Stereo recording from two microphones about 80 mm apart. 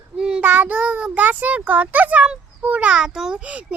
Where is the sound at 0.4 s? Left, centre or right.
Right.